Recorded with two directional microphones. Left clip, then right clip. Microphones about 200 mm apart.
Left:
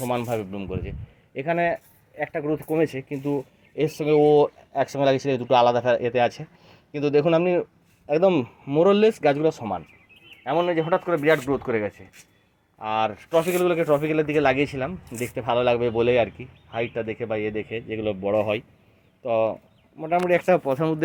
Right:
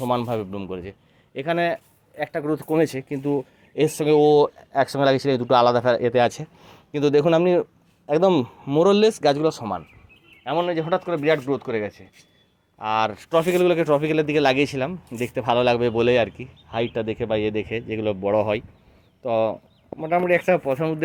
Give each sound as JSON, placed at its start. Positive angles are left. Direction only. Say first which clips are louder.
{"t": 0.0, "sound": "a man's voice", "louder": "right 2 dB", "side_deg": -20}
{"t": 12.8, "sound": "a man's voice", "louder": "right 2 dB", "side_deg": -20}
{"t": 16.7, "sound": "a man's voice", "louder": "right 3 dB", "side_deg": -30}